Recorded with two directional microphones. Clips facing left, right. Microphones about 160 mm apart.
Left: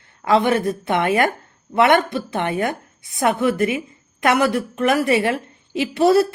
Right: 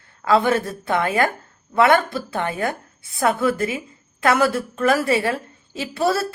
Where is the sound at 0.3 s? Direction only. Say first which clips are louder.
Left 1 dB; 20° left (ahead or behind).